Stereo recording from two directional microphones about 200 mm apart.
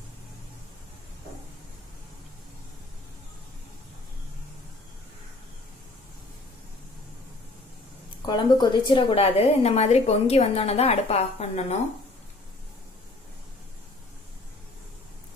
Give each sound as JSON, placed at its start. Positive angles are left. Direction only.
{"t": 8.3, "sound": "a woman's voice", "side_deg": 20}